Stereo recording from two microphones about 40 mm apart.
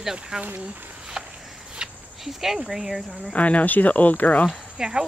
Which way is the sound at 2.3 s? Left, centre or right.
Centre.